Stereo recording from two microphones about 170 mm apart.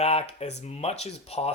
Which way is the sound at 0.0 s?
35° left (ahead or behind).